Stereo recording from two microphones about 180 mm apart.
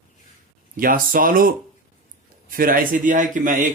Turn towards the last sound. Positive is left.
turn(degrees=-45)  # may be behind; listen again after turning